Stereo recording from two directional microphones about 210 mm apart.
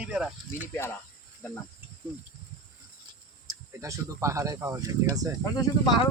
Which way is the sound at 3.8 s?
15° right (ahead or behind).